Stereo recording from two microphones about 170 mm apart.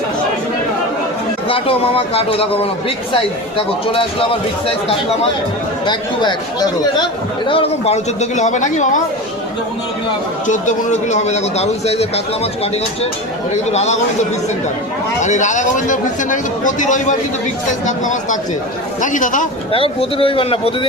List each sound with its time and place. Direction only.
1.5 s speech: 30° left (ahead or behind)
3.9 s speech: 30° left (ahead or behind)
10.4 s speech: 45° left (ahead or behind)
15.2 s speech: 45° left (ahead or behind)
19.7 s speech: 30° left (ahead or behind)